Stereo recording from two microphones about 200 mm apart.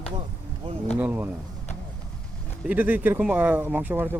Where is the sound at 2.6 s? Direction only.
10° right (ahead or behind).